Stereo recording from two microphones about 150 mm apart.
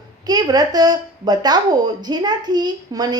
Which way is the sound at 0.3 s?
25° right (ahead or behind).